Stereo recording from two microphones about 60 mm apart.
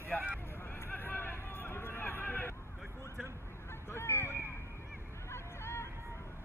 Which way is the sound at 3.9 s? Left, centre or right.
Left.